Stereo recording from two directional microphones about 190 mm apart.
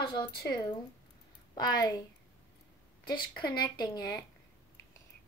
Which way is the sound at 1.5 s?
20° left (ahead or behind).